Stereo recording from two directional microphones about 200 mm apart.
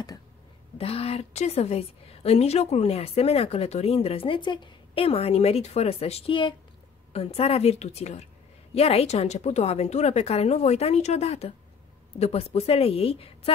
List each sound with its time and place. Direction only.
0.7 s a woman's voice: 30° left (ahead or behind)